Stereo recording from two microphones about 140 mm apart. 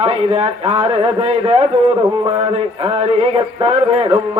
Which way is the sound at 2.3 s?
45° right (ahead or behind).